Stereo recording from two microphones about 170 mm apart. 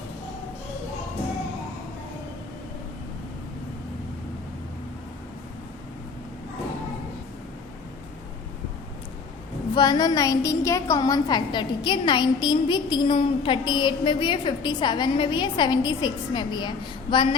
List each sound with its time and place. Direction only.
9.7 s a woman's voice: 25° left (ahead or behind)